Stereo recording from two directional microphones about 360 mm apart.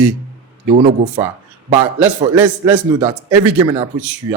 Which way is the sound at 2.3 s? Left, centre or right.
Centre.